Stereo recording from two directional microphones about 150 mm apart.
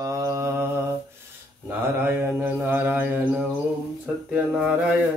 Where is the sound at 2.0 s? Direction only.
15° right (ahead or behind).